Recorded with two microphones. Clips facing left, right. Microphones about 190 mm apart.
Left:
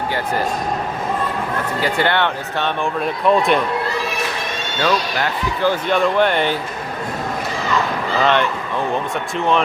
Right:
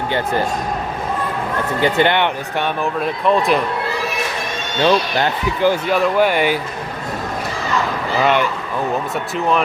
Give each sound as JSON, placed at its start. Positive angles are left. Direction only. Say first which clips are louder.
{"t": 1.8, "sound": "speech", "louder": "right 3 dB", "side_deg": -20}
{"t": 3.2, "sound": "speech", "louder": "left 1 dB", "side_deg": 0}
{"t": 4.8, "sound": "speech", "louder": "right 4 dB", "side_deg": -25}
{"t": 5.6, "sound": "speech", "louder": "right 1 dB", "side_deg": -5}
{"t": 8.2, "sound": "speech", "louder": "right 1 dB", "side_deg": -10}